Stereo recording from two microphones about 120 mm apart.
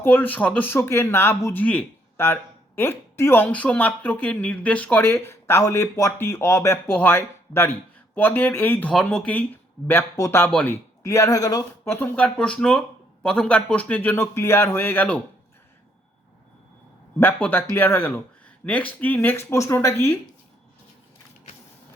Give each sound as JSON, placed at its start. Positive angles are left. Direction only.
{"t": 0.0, "sound": "speech", "side_deg": 15}
{"t": 10.5, "sound": "speech", "side_deg": 10}
{"t": 11.0, "sound": "speech", "side_deg": 25}
{"t": 11.9, "sound": "speech", "side_deg": 15}
{"t": 17.2, "sound": "speech", "side_deg": 15}